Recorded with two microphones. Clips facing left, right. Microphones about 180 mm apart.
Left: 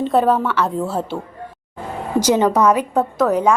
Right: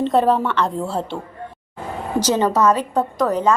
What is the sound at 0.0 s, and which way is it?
A woman's voice, centre (ahead or behind).